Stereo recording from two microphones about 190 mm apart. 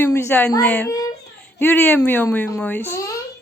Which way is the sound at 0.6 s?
5° left (ahead or behind).